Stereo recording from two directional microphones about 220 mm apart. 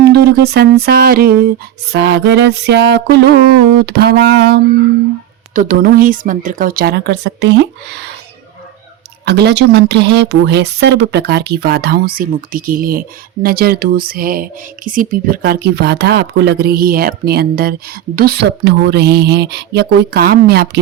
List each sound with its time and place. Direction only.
0.1 s speech: 45° right (ahead or behind)
5.5 s speech: 35° right (ahead or behind)
9.2 s speech: 50° right (ahead or behind)